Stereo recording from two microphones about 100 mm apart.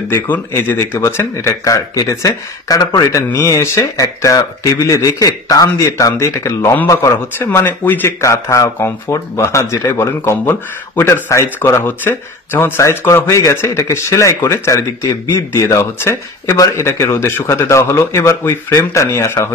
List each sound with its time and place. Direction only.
0.1 s speech: 20° left (ahead or behind)
7.3 s speech: 20° left (ahead or behind)
8.2 s speech: 30° left (ahead or behind)